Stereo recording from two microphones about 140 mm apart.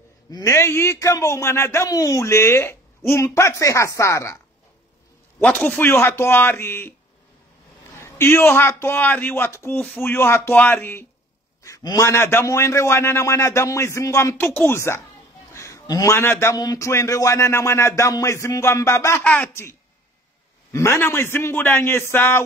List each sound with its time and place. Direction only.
0.3 s a man's voice: 20° left (ahead or behind)
5.4 s a man's voice: 10° left (ahead or behind)
8.0 s a man's voice: 15° left (ahead or behind)
20.7 s a man's voice: 20° left (ahead or behind)